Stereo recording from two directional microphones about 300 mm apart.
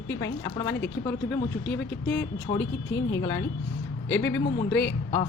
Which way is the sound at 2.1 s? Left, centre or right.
Centre.